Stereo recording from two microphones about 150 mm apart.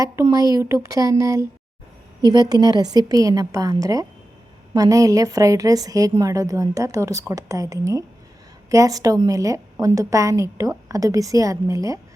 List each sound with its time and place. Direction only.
0.0 s a woman's voice: 25° right (ahead or behind)